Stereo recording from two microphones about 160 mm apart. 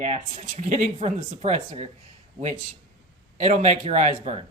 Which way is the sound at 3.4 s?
45° right (ahead or behind).